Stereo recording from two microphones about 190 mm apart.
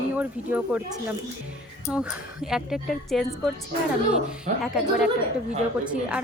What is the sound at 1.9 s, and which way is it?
A woman's voice, 5° right (ahead or behind).